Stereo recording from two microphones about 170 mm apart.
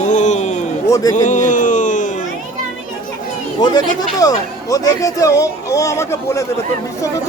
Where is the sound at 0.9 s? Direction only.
20° left (ahead or behind).